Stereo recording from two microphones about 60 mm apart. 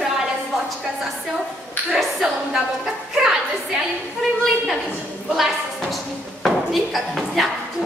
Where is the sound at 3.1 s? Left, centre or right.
Centre.